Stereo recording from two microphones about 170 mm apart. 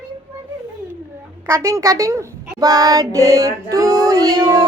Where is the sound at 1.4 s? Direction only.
15° right (ahead or behind).